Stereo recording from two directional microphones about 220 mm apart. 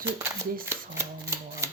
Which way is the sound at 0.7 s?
10° right (ahead or behind).